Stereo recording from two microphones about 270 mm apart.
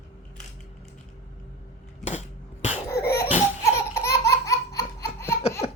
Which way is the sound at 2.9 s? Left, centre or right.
Left.